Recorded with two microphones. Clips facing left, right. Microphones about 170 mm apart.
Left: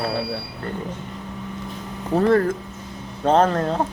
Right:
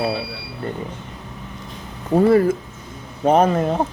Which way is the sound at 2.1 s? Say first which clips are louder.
Right 3 dB; 10° right (ahead or behind).